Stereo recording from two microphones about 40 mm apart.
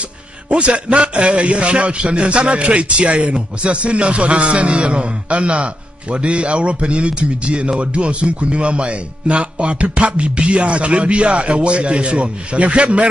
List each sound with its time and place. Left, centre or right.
0.5 s speech: right